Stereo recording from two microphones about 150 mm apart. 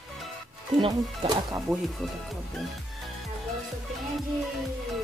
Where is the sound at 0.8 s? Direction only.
30° right (ahead or behind).